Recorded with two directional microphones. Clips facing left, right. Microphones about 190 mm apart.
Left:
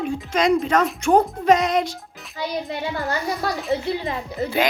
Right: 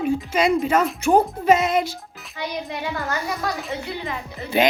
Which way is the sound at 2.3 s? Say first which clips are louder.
Left 2 dB; 30° left (ahead or behind).